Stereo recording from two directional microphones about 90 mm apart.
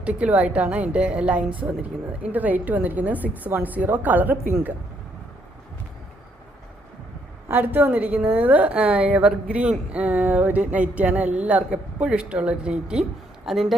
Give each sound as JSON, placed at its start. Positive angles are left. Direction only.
{"t": 0.0, "sound": "a woman's voice", "side_deg": -15}
{"t": 7.4, "sound": "a woman's voice", "side_deg": -20}